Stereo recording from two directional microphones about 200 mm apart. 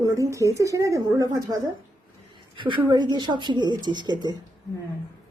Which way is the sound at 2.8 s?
20° right (ahead or behind).